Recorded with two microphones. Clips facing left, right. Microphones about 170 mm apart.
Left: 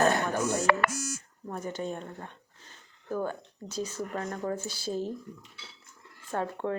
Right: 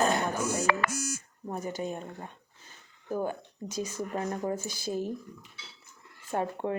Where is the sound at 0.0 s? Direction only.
5° right (ahead or behind).